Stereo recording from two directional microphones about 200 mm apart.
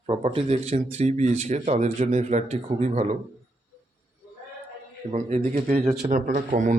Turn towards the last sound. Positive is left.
turn(degrees=-40)  # may be behind; listen again after turning